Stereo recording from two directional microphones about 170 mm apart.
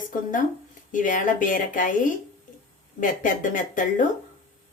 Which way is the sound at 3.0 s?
50° left (ahead or behind).